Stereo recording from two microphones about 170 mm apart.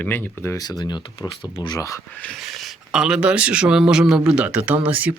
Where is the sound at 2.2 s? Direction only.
Centre (ahead or behind).